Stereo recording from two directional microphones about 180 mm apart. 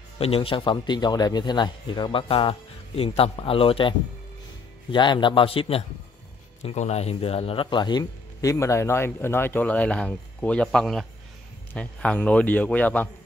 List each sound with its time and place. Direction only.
0.2 s a man's voice: 30° left (ahead or behind)
4.9 s speech: 25° left (ahead or behind); by 13.1 s 10° left (ahead or behind)